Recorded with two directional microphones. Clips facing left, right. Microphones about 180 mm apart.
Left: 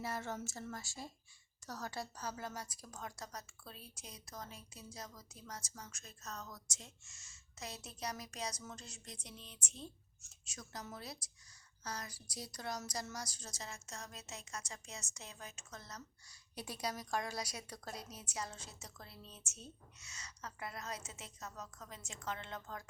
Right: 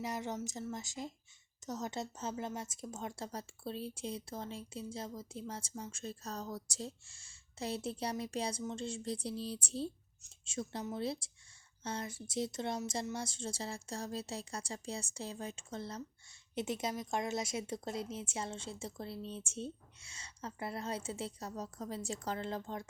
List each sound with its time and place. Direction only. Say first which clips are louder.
0.0 s a woman's voice: right 3 dB; 15° right (ahead or behind)